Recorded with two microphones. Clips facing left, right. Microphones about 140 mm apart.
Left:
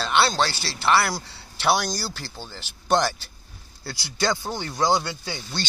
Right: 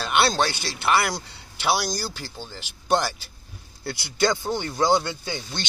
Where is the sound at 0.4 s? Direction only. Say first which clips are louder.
Even; 20° right (ahead or behind).